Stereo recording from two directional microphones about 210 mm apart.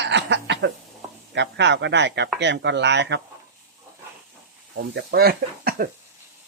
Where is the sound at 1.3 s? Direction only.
55° right (ahead or behind).